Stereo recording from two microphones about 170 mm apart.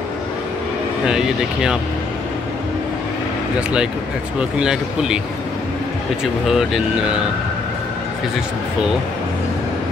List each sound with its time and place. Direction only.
1.0 s speech: 5° right (ahead or behind)
4.4 s speech: 5° right (ahead or behind)
6.4 s speech: 5° right (ahead or behind)